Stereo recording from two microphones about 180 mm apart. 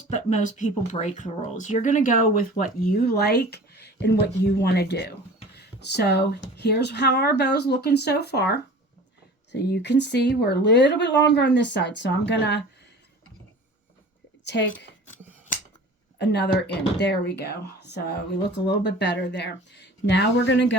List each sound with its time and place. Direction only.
0.1 s a woman's voice: 40° left (ahead or behind); by 12.6 s 75° left (ahead or behind)
14.4 s a woman's voice: 75° left (ahead or behind)
16.1 s a woman's voice: 70° left (ahead or behind)